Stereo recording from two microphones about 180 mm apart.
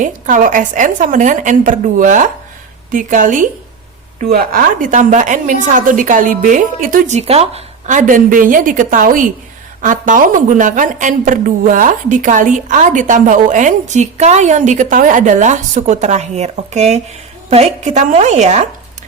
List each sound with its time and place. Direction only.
0.0 s a woman's voice: 45° right (ahead or behind)